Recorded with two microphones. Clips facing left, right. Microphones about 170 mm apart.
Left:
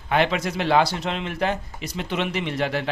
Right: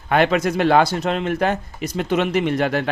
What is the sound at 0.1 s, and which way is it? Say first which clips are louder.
Speech: right 5 dB; 50° right (ahead or behind).